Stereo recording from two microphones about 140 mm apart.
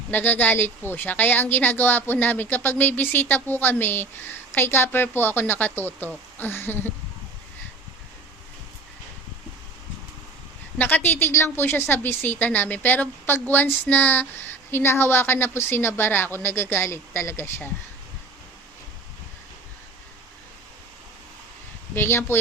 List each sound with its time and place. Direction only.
0.1 s a woman's voice: 15° left (ahead or behind)
10.8 s a woman's voice: 15° left (ahead or behind)
21.9 s a woman's voice: 15° left (ahead or behind)